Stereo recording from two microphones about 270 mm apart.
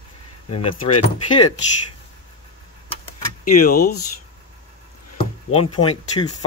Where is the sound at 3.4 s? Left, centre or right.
Left.